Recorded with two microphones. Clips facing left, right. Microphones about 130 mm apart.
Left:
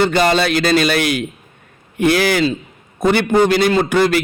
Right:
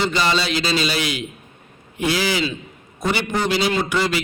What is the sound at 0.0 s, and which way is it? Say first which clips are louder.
A man's voice: left 6 dB; 50° left (ahead or behind).